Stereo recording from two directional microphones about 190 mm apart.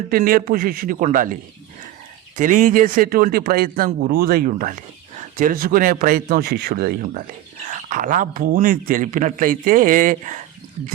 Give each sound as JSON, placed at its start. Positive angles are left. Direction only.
{"t": 0.1, "sound": "speech", "side_deg": -50}
{"t": 2.4, "sound": "speech", "side_deg": -40}